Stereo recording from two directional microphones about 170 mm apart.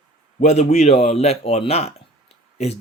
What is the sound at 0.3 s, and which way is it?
Speech, 45° left (ahead or behind).